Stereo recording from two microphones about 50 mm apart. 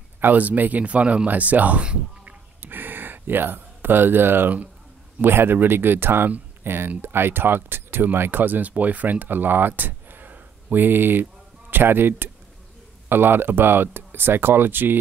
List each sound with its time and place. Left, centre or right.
0.2 s speech: right
2.6 s a sound: right
5.2 s speech: right